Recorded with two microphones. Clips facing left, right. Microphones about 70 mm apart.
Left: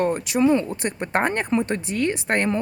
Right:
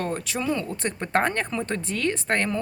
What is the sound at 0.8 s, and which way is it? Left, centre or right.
Speech, centre.